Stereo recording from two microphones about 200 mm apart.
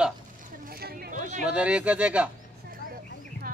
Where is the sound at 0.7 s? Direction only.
50° right (ahead or behind).